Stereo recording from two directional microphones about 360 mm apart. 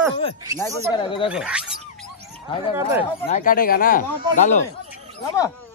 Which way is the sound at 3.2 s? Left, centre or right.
Left.